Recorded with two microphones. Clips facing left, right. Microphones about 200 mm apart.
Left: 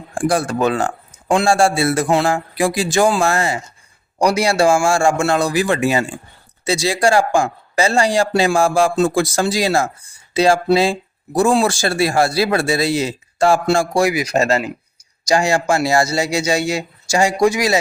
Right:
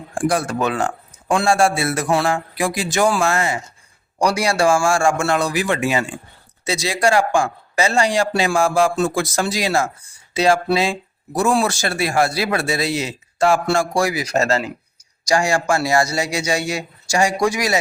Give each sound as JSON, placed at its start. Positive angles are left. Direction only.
{"t": 0.3, "sound": "a man's voice", "side_deg": 30}
{"t": 4.2, "sound": "a man's voice", "side_deg": 20}